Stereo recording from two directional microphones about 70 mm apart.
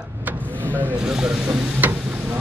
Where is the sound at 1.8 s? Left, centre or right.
Right.